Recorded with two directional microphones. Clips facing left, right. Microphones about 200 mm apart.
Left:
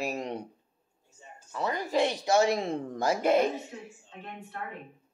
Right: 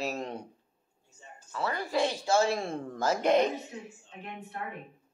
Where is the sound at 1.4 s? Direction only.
15° left (ahead or behind).